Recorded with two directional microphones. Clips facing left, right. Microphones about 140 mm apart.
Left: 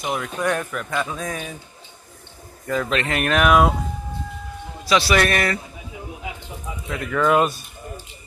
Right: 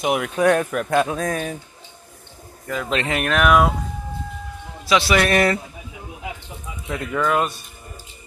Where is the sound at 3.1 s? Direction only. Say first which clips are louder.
Even; centre (ahead or behind).